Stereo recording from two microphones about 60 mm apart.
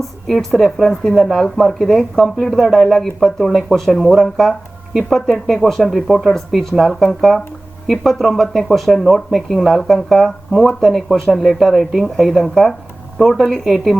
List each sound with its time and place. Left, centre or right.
0.3 s speech: centre